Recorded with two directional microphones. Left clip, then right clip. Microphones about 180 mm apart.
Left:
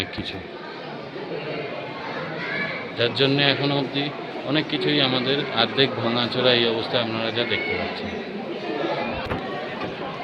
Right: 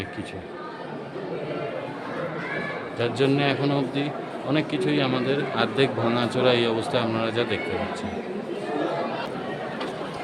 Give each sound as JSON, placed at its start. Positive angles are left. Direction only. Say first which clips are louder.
{"t": 3.0, "sound": "a man's voice", "louder": "left 3 dB", "side_deg": -10}